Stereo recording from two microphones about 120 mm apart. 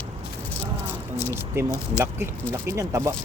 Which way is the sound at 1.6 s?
20° right (ahead or behind).